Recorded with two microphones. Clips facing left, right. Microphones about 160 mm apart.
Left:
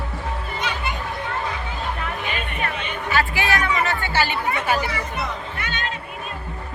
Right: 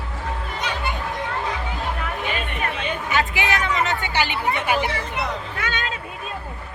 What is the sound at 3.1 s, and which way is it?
Chatter, 20° right (ahead or behind).